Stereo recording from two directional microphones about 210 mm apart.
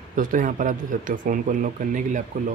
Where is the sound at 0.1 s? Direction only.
40° right (ahead or behind).